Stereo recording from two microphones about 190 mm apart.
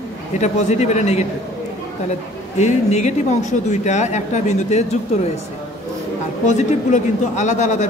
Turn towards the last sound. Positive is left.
turn(degrees=40)  # may be behind; listen again after turning